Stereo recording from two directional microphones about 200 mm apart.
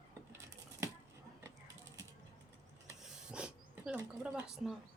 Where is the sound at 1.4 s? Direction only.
15° right (ahead or behind).